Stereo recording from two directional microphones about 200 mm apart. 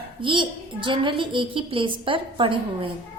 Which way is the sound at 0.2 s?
25° right (ahead or behind).